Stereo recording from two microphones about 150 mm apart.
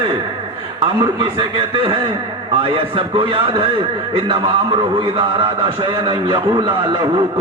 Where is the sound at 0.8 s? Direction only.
30° right (ahead or behind).